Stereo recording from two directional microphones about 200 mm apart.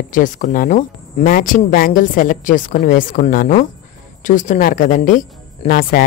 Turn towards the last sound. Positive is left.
turn(degrees=45)  # may be behind; listen again after turning